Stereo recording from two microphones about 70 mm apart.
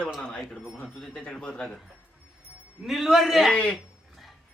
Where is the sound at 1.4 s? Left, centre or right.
Centre.